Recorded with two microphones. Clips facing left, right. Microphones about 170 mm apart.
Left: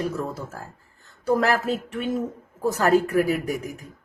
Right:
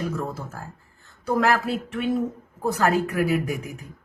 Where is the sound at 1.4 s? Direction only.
40° left (ahead or behind).